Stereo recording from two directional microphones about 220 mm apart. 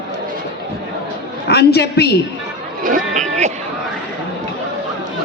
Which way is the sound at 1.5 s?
45° left (ahead or behind).